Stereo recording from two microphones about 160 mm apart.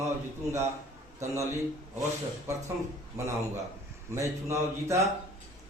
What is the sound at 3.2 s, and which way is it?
Speech, 20° right (ahead or behind).